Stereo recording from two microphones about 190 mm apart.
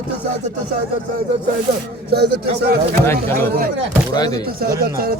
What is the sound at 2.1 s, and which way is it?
A man's voice, 55° right (ahead or behind).